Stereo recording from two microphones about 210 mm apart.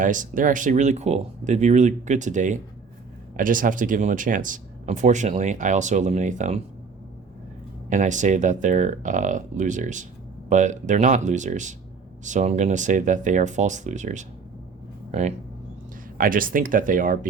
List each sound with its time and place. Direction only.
0.0 s speech: 40° right (ahead or behind)
7.9 s speech: 35° right (ahead or behind)
16.1 s speech: 40° right (ahead or behind)